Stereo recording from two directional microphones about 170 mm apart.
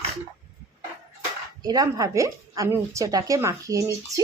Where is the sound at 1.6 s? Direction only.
20° right (ahead or behind).